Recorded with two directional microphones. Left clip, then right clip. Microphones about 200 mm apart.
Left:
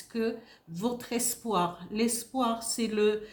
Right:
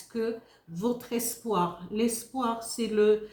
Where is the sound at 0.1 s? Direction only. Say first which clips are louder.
Right 1 dB; 45° left (ahead or behind).